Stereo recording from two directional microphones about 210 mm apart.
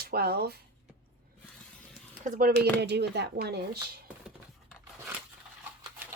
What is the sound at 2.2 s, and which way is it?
Speech, 40° right (ahead or behind).